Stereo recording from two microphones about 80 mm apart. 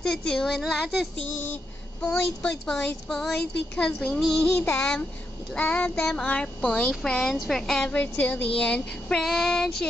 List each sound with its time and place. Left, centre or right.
0.0 s a woman's voice: centre
0.6 s speech: centre
1.4 s a woman's voice: centre
3.7 s speech: centre
4.1 s a woman's voice: centre